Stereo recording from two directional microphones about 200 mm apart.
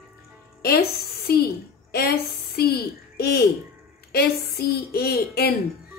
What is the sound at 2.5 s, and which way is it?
Speech, 50° left (ahead or behind).